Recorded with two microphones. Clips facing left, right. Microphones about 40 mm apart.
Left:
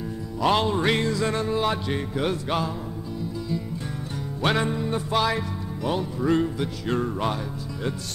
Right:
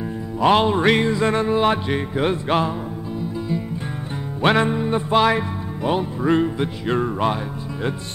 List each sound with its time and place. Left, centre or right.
0.4 s music: right
4.4 s music: right